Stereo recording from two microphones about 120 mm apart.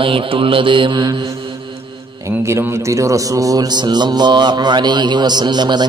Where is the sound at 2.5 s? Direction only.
25° right (ahead or behind).